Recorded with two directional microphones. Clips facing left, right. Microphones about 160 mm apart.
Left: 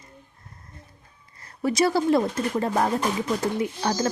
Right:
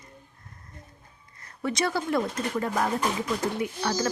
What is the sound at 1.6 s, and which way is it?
Speech, 30° left (ahead or behind).